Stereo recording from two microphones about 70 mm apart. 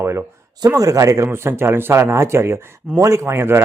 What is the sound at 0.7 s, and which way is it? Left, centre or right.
Speech, right.